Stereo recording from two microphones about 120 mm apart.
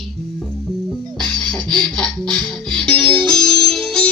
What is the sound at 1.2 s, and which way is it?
Music, 5° left (ahead or behind).